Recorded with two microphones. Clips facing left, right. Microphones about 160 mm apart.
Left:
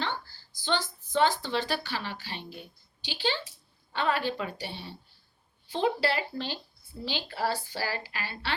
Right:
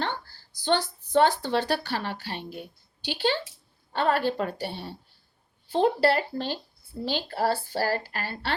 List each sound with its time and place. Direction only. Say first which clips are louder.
0.0 s a woman's voice: right 3 dB; 55° right (ahead or behind)